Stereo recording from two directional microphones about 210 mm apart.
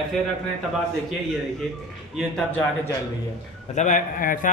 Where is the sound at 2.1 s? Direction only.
5° left (ahead or behind).